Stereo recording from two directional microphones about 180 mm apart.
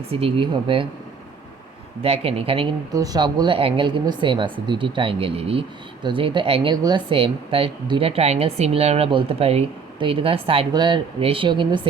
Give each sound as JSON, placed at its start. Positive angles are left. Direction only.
{"t": 0.1, "sound": "speech", "side_deg": -30}
{"t": 2.0, "sound": "speech", "side_deg": -35}
{"t": 2.9, "sound": "speech", "side_deg": -20}